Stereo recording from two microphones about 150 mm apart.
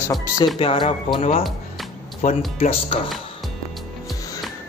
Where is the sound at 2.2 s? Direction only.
50° left (ahead or behind).